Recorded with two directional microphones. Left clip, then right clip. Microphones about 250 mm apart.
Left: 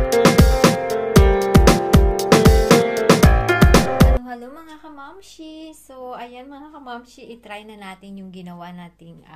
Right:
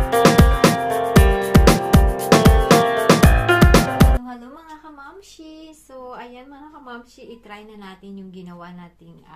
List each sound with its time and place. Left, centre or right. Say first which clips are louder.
0.2 s music: right 1 dB; centre
8.4 s speech: left 5 dB; left